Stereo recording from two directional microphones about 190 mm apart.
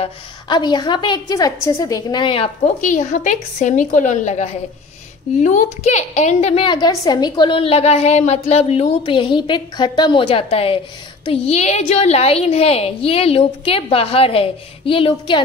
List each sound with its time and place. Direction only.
0.0 s a woman's voice: 25° left (ahead or behind)
2.8 s a woman's voice: 40° left (ahead or behind); by 15.4 s 25° left (ahead or behind)